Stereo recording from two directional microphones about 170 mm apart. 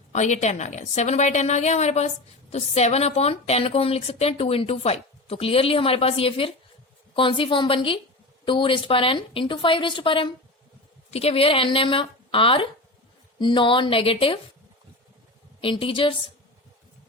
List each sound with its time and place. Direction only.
0.1 s a woman's voice: 45° left (ahead or behind)
15.6 s a woman's voice: 30° left (ahead or behind)